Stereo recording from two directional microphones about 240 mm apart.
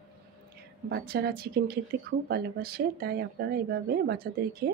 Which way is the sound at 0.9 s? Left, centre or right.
Right.